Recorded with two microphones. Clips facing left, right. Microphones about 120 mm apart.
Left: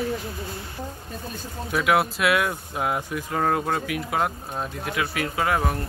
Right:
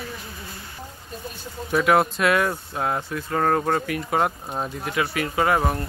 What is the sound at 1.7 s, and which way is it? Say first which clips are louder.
Speech: right 3 dB; 5° left (ahead or behind).